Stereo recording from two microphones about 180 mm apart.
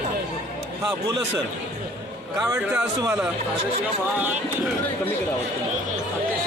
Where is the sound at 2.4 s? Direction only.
15° right (ahead or behind).